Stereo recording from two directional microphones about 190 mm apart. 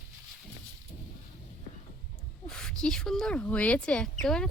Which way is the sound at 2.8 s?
5° left (ahead or behind).